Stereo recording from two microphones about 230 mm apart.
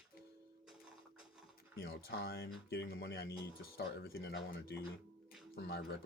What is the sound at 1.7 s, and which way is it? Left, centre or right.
Speech, left.